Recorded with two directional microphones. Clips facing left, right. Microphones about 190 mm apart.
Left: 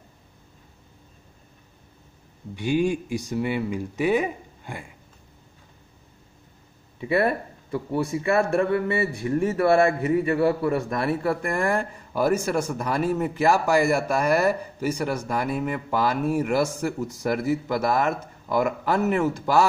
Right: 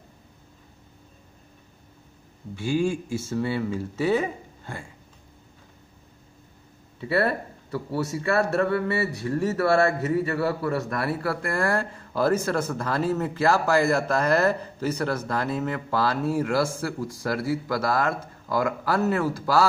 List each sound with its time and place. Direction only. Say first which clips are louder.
2.5 s speech: left 2 dB; 20° left (ahead or behind)
7.0 s speech: left 2 dB; 15° left (ahead or behind)